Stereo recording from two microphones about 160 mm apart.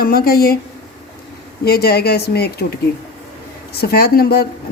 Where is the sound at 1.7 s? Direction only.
80° left.